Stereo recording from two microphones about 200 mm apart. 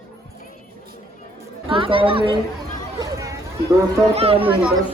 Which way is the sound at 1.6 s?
25° right (ahead or behind).